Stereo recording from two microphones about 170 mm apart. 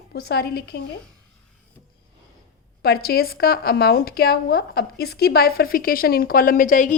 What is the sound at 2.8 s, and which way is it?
A woman's voice, 65° left (ahead or behind).